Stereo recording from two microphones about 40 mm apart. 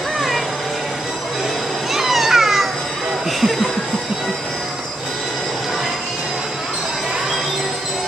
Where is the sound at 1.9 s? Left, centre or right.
Centre.